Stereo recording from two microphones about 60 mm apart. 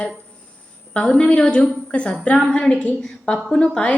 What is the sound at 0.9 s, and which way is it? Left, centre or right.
A woman's voice, centre.